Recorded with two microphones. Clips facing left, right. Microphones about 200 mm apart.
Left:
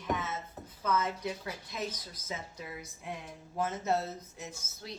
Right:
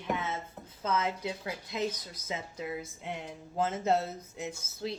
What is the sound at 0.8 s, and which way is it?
Speech, 25° right (ahead or behind).